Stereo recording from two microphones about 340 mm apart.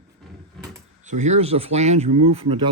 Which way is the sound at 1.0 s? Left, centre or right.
Right.